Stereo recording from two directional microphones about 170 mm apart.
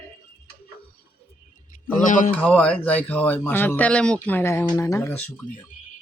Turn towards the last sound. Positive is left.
turn(degrees=10)  # may be behind; listen again after turning